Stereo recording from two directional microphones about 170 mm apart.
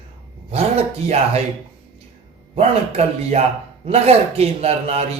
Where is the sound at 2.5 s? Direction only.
40° right (ahead or behind).